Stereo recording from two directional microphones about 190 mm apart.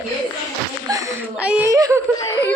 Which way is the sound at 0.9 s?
20° right (ahead or behind).